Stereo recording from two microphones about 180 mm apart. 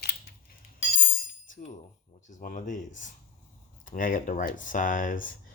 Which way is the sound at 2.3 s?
45° left (ahead or behind).